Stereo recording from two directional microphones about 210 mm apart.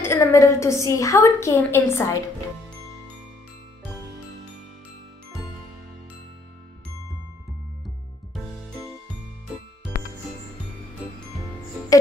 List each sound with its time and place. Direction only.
0.0 s a woman's voice: 15° left (ahead or behind)
11.9 s music: 15° left (ahead or behind)